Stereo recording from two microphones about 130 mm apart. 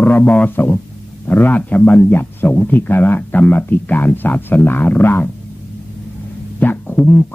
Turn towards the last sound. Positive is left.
turn(degrees=10)  # may be behind; listen again after turning